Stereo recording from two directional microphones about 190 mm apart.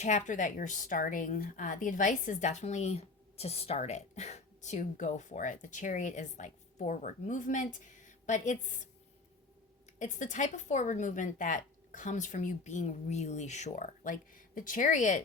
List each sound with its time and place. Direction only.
0.0 s a woman's voice: 40° left (ahead or behind)
10.0 s a woman's voice: 40° left (ahead or behind)